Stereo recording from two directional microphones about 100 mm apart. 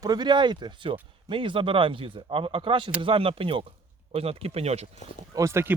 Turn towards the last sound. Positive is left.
turn(degrees=-25)  # may be behind; listen again after turning